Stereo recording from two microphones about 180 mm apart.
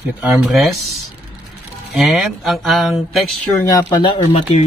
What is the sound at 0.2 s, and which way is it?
Speech, 5° right (ahead or behind).